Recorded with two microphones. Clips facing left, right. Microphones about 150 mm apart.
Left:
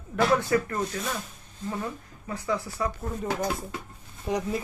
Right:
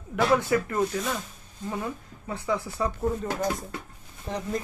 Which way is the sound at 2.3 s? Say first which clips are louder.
Right 1 dB; 15° right (ahead or behind).